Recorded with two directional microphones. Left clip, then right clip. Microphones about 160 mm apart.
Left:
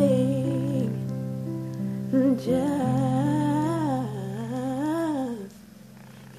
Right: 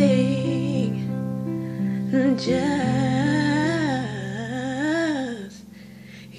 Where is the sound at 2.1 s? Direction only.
25° right (ahead or behind).